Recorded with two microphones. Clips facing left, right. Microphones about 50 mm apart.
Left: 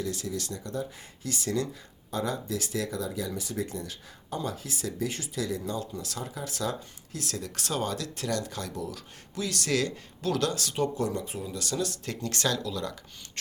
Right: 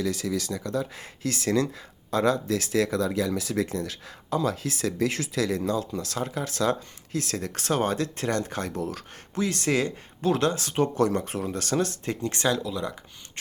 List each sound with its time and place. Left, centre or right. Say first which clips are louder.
0.5 s speech: right 5 dB; right
10.9 s speech: right 6 dB; right
12.0 s speech: right 4 dB; right